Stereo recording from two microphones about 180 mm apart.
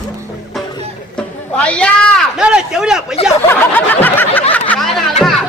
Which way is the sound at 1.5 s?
5° left (ahead or behind).